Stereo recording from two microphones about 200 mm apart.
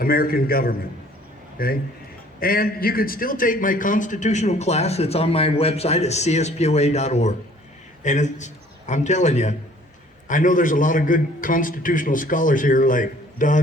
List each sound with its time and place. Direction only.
0.0 s a man's voice: 45° left (ahead or behind)